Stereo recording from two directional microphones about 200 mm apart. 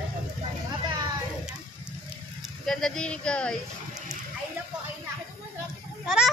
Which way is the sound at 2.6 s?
5° left (ahead or behind).